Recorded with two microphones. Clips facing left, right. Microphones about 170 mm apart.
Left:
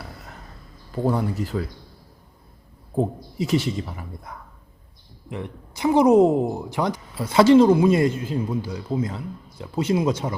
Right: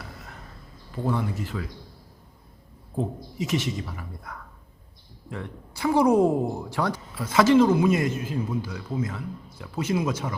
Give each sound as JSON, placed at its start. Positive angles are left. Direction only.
{"t": 1.0, "sound": "speech", "side_deg": 35}
{"t": 3.0, "sound": "speech", "side_deg": 35}
{"t": 7.2, "sound": "speech", "side_deg": 30}